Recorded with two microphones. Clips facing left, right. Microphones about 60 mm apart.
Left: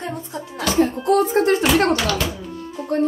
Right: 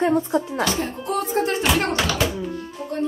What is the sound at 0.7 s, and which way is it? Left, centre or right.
Speech, left.